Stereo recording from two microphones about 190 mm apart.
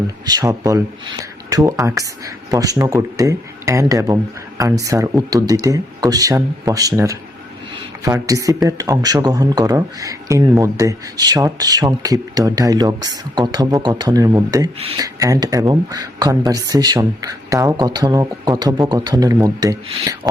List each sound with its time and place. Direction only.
0.3 s speech: 20° right (ahead or behind)
14.8 s speech: 30° right (ahead or behind)
15.0 s speech: 20° right (ahead or behind)